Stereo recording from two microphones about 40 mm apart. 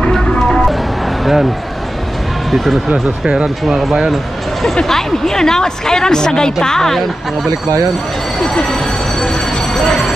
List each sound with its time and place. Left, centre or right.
0.0 s music: centre
1.2 s speech: centre
2.5 s speech: centre
2.9 s speech: right
3.6 s speech: centre
4.8 s a woman's voice: centre
8.4 s a sound: centre